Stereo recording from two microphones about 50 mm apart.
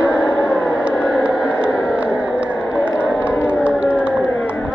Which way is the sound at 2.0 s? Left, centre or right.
Right.